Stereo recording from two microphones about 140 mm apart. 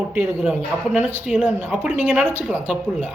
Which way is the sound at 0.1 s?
15° right (ahead or behind).